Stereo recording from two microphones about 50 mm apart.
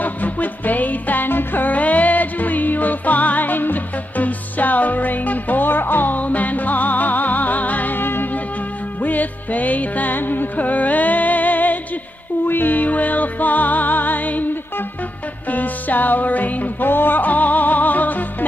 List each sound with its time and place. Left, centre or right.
0.0 s music: left